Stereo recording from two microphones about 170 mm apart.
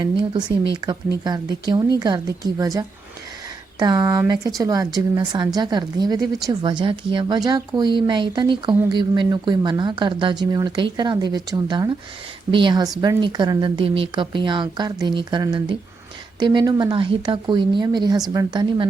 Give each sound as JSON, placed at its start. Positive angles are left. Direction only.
{"t": 0.0, "sound": "speech", "side_deg": -25}